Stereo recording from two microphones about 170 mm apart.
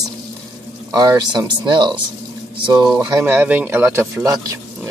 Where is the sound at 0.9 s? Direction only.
20° right (ahead or behind).